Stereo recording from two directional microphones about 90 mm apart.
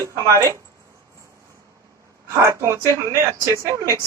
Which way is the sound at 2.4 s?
30° right (ahead or behind).